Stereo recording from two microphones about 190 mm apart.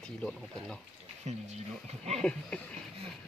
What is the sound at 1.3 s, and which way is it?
Speech, 35° right (ahead or behind).